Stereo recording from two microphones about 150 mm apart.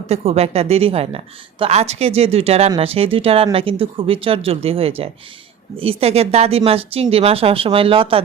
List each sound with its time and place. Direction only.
0.1 s speech: 45° right (ahead or behind)